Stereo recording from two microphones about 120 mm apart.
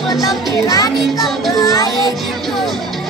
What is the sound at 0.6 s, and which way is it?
Speech, 30° left (ahead or behind).